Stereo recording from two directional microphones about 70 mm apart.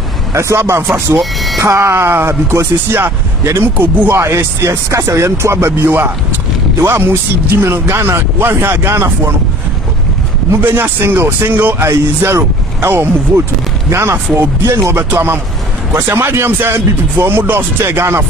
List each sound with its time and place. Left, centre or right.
0.3 s a man's voice: right
1.1 s music: centre
1.6 s speech: right
10.6 s speech: right